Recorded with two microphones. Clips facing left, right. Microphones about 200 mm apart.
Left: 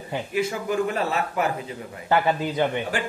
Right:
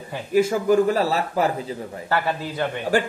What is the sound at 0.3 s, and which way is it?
A man's voice, 40° right (ahead or behind).